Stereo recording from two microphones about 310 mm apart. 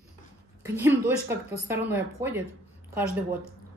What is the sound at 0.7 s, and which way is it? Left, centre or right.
A woman's voice, centre.